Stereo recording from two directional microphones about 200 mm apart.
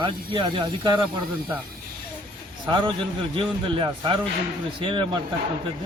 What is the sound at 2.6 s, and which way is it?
Speech, 25° right (ahead or behind).